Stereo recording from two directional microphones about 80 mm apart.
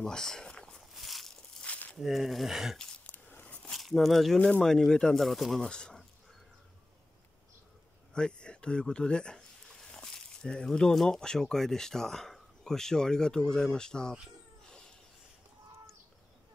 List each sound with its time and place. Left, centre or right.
0.0 s walk: centre
0.9 s a sound: centre
1.6 s a sound: centre
2.0 s speech: centre
2.8 s a sound: centre
3.3 s biting: centre
3.7 s speech: centre
4.4 s speech: centre
8.1 s speech: centre